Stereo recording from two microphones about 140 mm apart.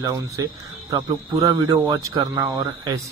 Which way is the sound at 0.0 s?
25° right (ahead or behind).